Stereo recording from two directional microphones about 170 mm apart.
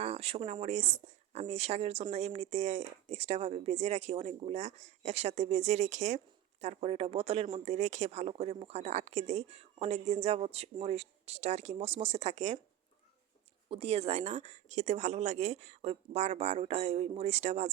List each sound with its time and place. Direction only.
0.0 s speech: 35° right (ahead or behind)
13.7 s speech: 35° right (ahead or behind)